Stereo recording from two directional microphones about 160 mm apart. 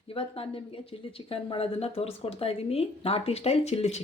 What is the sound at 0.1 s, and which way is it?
A woman's voice, 35° left (ahead or behind).